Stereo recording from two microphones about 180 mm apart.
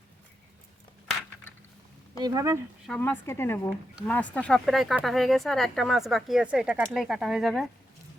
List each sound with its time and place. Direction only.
2.2 s speech: 20° right (ahead or behind)
3.0 s a woman's voice: 10° left (ahead or behind)